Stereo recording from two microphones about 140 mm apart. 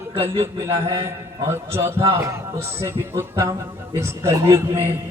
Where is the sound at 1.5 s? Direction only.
20° right (ahead or behind).